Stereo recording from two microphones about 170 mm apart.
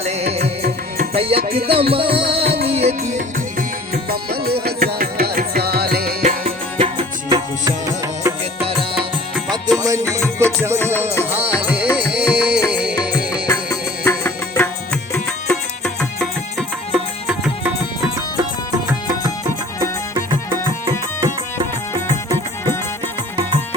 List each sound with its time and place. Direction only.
0.0 s music: 40° right (ahead or behind)
2.4 s music: 70° right (ahead or behind)
2.6 s music: 35° right (ahead or behind)
3.9 s music: 65° right (ahead or behind)
6.7 s music: 35° right (ahead or behind)
9.7 s music: 20° right (ahead or behind)
11.3 s music: 10° right (ahead or behind)
13.1 s music: 20° left (ahead or behind); by 17.3 s centre (ahead or behind)
21.2 s music: 20° right (ahead or behind)